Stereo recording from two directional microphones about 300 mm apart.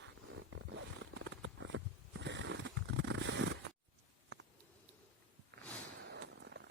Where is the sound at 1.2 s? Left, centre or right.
Right.